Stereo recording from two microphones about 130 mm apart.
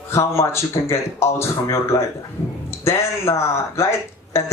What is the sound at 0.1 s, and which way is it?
Speech, 20° left (ahead or behind).